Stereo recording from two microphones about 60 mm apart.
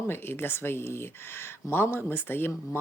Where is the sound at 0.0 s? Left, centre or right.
Left.